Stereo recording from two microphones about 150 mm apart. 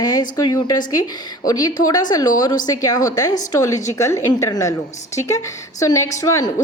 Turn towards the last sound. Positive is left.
turn(degrees=25)  # may be behind; listen again after turning